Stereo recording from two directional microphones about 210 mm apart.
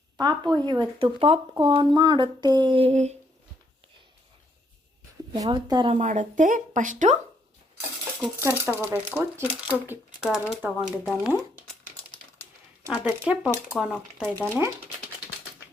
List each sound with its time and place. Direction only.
0.2 s speech: 20° right (ahead or behind)
5.3 s speech: 20° right (ahead or behind)
5.9 s speech: 35° right (ahead or behind)
8.4 s speech: 10° right (ahead or behind)
11.3 s crumpling: 10° right (ahead or behind)
12.9 s speech: 5° right (ahead or behind)
13.9 s speech: 5° left (ahead or behind)